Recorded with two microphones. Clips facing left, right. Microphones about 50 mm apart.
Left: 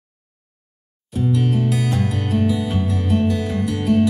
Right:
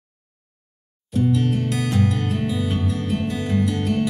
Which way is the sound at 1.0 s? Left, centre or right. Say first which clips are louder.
Even; centre.